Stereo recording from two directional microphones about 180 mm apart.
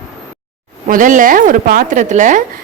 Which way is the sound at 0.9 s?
50° right (ahead or behind).